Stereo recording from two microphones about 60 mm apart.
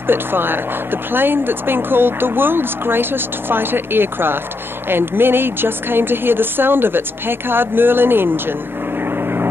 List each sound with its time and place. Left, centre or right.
0.0 s speech: right
9.0 s vehicle: right